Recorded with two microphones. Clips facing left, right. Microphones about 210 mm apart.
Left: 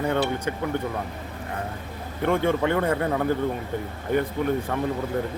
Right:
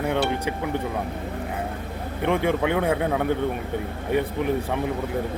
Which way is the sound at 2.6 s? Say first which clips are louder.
Right 1 dB; 10° right (ahead or behind).